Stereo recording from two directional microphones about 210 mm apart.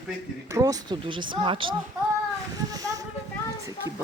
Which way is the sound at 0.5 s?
15° right (ahead or behind).